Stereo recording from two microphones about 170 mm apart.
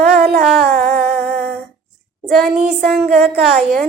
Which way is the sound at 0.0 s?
70° right (ahead or behind).